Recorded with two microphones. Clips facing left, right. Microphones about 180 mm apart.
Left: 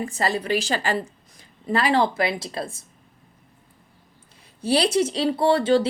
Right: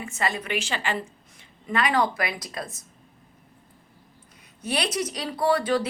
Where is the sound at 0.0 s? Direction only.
35° left (ahead or behind).